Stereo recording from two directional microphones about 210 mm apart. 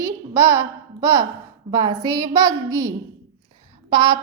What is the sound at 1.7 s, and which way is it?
A woman's voice, 15° right (ahead or behind).